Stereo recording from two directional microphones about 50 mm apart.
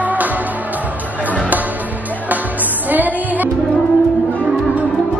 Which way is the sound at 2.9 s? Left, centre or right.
Right.